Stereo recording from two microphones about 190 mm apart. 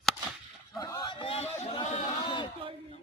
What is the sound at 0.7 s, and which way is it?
Speech, 20° left (ahead or behind).